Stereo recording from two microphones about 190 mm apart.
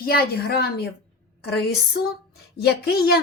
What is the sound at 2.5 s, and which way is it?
Speech, 55° left (ahead or behind).